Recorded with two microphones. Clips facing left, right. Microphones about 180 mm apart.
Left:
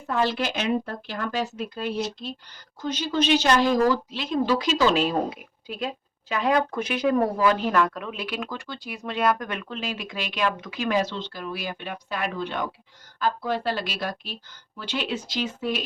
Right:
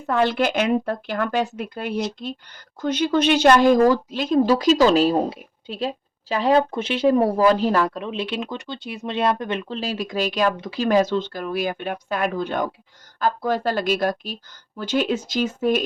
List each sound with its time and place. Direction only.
0.1 s speech: 60° right (ahead or behind); by 5.1 s 40° right (ahead or behind)
5.1 s speech: 30° right (ahead or behind); by 15.8 s 45° right (ahead or behind)